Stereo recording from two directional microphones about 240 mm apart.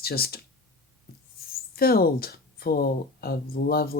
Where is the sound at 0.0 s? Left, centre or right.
Left.